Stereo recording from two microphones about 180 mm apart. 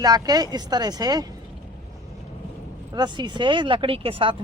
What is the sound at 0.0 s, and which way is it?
Speech, 20° right (ahead or behind).